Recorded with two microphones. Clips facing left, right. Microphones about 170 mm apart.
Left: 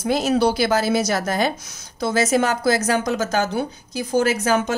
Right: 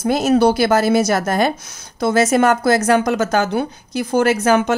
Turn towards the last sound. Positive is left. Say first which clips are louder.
# right 4 dB
turn(degrees=-60)  # may be behind; listen again after turning